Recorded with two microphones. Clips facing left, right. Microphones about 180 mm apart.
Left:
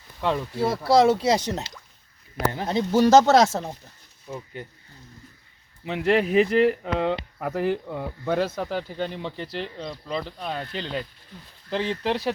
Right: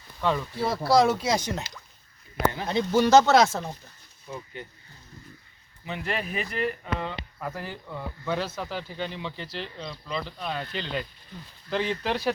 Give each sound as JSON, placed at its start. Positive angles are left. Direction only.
{"t": 0.2, "sound": "speech", "side_deg": 25}
{"t": 5.8, "sound": "speech", "side_deg": 75}